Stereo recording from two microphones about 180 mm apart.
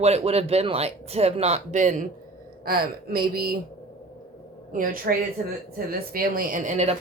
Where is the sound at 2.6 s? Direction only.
55° right (ahead or behind).